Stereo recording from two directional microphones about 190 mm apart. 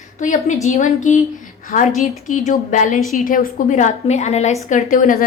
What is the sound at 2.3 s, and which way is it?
A woman's voice, 40° left (ahead or behind).